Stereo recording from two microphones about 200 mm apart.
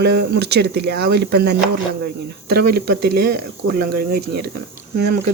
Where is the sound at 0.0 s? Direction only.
55° right (ahead or behind).